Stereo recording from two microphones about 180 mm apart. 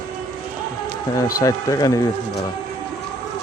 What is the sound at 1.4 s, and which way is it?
Speech, 20° left (ahead or behind).